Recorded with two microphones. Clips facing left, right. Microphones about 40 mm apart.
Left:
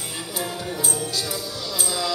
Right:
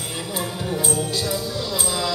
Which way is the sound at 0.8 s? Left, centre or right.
Right.